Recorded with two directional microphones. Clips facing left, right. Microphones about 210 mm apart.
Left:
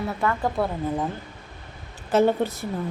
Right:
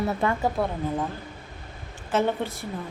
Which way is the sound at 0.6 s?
Centre (ahead or behind).